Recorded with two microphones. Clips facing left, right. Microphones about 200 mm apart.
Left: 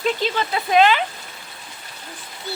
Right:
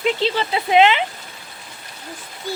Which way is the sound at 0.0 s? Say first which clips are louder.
Right 2 dB; 25° right (ahead or behind).